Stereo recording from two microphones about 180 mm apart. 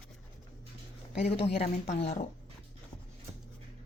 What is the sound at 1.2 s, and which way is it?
Speech, 35° left (ahead or behind).